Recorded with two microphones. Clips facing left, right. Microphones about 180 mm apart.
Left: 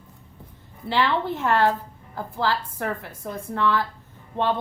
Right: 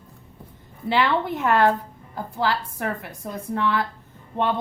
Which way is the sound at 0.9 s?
15° right (ahead or behind).